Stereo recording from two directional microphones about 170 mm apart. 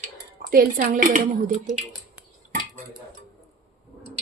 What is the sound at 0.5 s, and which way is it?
Speech, 55° right (ahead or behind).